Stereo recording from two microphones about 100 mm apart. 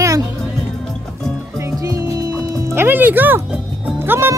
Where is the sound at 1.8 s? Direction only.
35° right (ahead or behind).